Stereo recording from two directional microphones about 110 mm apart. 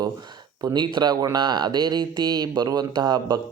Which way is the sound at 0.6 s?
35° right (ahead or behind).